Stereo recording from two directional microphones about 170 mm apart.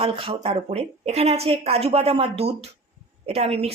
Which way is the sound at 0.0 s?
30° right (ahead or behind).